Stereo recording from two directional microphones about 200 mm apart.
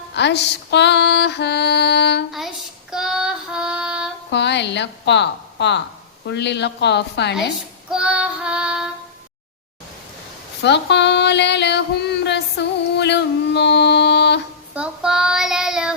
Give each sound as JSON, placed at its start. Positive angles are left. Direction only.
{"t": 0.2, "sound": "music", "side_deg": 60}
{"t": 2.9, "sound": "child singing", "side_deg": -5}
{"t": 4.3, "sound": "a woman's voice", "side_deg": 60}
{"t": 6.2, "sound": "music", "side_deg": 60}
{"t": 7.9, "sound": "child singing", "side_deg": -5}
{"t": 10.6, "sound": "female singing", "side_deg": 60}
{"t": 14.8, "sound": "child singing", "side_deg": -5}